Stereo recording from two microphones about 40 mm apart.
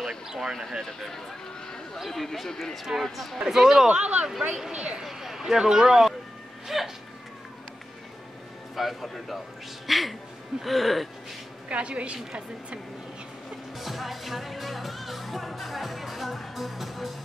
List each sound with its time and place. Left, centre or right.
0.4 s a woman's voice: centre
3.3 s speech: centre
3.9 s a woman's voice: right
5.0 s speech: centre
6.7 s a sound: centre
8.7 s speech: centre
11.7 s a woman's voice: right
13.7 s music: centre